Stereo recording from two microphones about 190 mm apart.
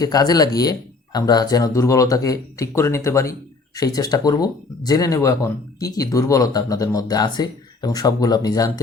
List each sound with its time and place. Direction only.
0.0 s speech: 20° left (ahead or behind)